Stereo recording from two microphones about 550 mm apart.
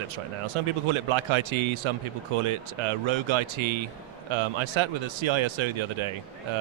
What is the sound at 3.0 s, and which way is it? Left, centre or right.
Speech, right.